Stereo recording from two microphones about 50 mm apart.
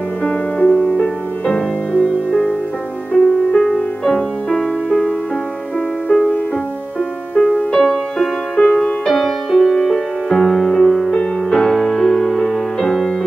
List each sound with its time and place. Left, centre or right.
0.2 s music: left
7.4 s music: centre
9.8 s music: centre